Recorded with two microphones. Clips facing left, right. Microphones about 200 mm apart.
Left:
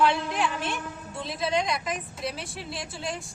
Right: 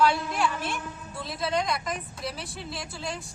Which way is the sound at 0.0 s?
Centre (ahead or behind).